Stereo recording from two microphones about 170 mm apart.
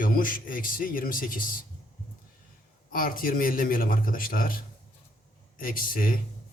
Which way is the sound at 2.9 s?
55° left (ahead or behind).